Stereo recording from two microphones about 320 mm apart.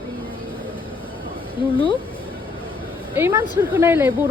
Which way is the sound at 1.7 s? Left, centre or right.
Centre.